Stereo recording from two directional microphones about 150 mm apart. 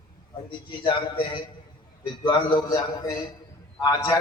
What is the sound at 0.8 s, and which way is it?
A man's voice, 35° left (ahead or behind).